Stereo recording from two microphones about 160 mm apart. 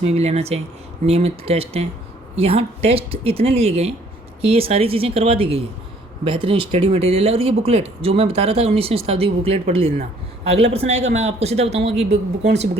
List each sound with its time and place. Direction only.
0.0 s speech: 40° right (ahead or behind)